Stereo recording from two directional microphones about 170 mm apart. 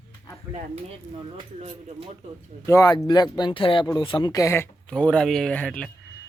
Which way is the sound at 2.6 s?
15° left (ahead or behind).